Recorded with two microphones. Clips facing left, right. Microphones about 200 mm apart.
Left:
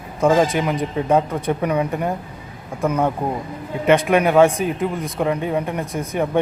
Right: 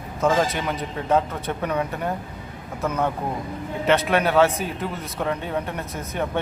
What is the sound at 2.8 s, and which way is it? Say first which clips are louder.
Speech: left 5 dB; 10° left (ahead or behind).